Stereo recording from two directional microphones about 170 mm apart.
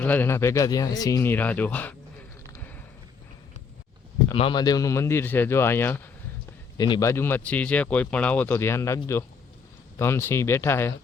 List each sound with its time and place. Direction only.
0.0 s speech: 10° left (ahead or behind)
2.5 s a sound: 10° left (ahead or behind)
4.3 s speech: 30° left (ahead or behind); by 6.0 s 15° left (ahead or behind)
6.7 s speech: 25° left (ahead or behind)
10.0 s speech: 15° left (ahead or behind)